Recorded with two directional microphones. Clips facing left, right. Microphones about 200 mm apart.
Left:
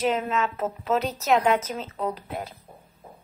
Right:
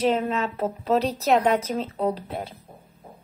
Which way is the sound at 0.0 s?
35° right (ahead or behind).